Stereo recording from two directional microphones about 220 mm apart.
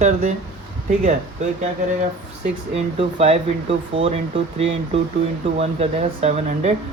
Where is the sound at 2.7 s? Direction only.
25° right (ahead or behind).